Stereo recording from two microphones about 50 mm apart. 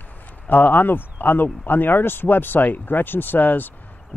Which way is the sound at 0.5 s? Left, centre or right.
Left.